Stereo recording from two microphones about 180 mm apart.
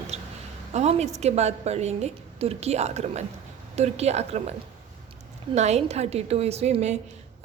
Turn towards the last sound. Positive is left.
turn(degrees=-40)  # may be behind; listen again after turning